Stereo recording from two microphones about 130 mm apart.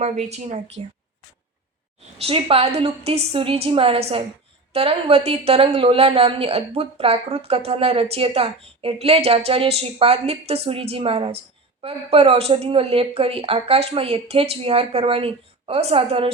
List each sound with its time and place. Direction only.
0.0 s speech: 60° right (ahead or behind)
2.2 s a woman's voice: 45° right (ahead or behind)